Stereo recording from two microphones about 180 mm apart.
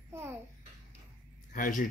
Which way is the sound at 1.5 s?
50° left (ahead or behind).